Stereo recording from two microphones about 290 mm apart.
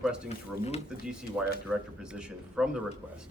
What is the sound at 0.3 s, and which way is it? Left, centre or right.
Speech, left.